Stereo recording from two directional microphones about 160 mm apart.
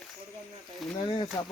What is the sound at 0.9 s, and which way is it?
Speech, 30° left (ahead or behind).